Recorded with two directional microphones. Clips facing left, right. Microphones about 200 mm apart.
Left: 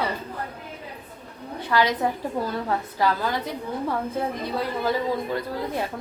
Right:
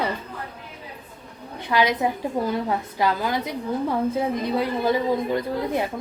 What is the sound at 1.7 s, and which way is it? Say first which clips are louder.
A woman's voice: right 1 dB; 15° right (ahead or behind).